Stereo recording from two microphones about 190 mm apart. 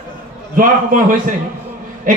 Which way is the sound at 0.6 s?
45° right (ahead or behind).